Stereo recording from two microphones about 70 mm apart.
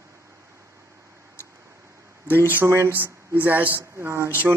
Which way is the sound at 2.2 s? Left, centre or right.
Right.